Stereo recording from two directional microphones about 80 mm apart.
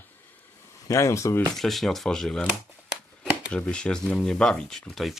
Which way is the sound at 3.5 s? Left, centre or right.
Centre.